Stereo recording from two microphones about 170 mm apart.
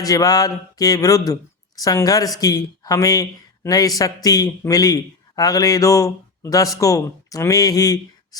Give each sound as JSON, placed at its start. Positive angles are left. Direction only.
{"t": 0.0, "sound": "speech", "side_deg": 20}